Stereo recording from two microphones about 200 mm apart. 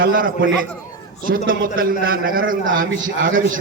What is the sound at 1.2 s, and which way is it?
A man's voice, 45° right (ahead or behind).